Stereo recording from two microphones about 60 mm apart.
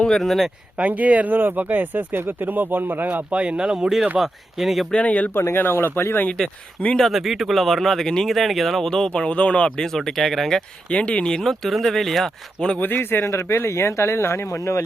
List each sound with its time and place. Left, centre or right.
0.0 s speech: centre
0.3 s speech: centre
0.8 s speech: right
3.4 s speech: centre
4.9 s speech: centre
5.3 s speech: left
6.3 s speech: centre
7.1 s speech: centre
10.9 s speech: centre
11.3 s speech: centre
12.8 s speech: left
13.6 s speech: left